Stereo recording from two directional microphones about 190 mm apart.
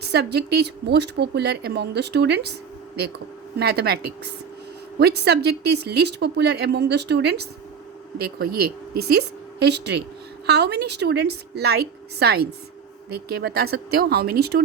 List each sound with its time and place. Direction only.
0.0 s speech: 60° right (ahead or behind)
3.6 s speech: 60° right (ahead or behind)
4.9 s speech: 60° right (ahead or behind)